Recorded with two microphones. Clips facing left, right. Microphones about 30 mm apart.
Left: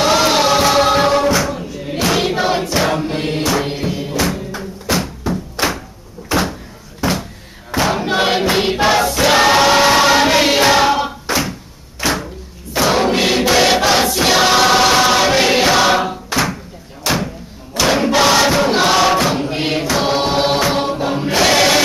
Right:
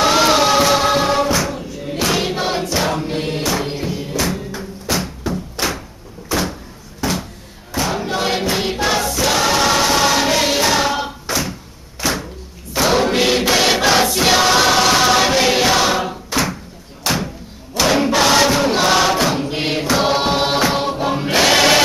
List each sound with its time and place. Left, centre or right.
0.0 s music: centre
5.3 s a sound: centre
6.3 s door: left
7.0 s door: centre
7.7 s crowd: left
8.4 s choir: left
12.0 s a sound: left
12.7 s a sound: centre
13.5 s choir: centre
15.3 s music: centre
17.7 s crowd: centre
18.9 s chant: centre
21.0 s choir: centre